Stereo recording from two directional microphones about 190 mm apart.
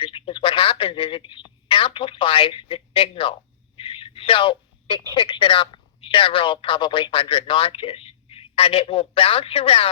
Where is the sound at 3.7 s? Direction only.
30° left (ahead or behind).